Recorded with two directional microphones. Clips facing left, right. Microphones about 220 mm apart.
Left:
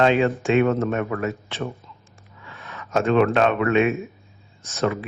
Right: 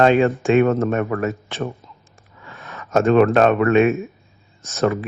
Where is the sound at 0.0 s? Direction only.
45° right (ahead or behind).